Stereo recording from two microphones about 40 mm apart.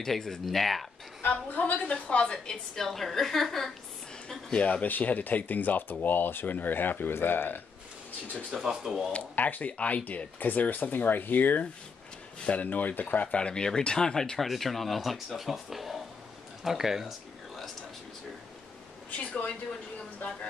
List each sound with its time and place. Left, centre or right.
0.0 s speech: centre
1.2 s a woman's voice: left; by 3.7 s centre
4.5 s speech: left
4.8 s speech: left
8.5 s speech: centre
9.3 s speech: left
12.4 s a woman's voice: left
13.4 s speech: left
14.4 s speech: centre
19.0 s a sound: left